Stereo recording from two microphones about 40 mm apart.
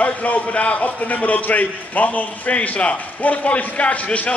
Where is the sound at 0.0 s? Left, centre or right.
Left.